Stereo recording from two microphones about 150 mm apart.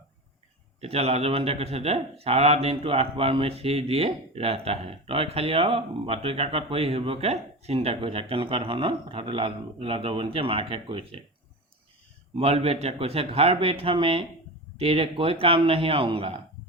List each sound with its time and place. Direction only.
0.8 s speech: 40° right (ahead or behind)
12.3 s speech: 40° right (ahead or behind)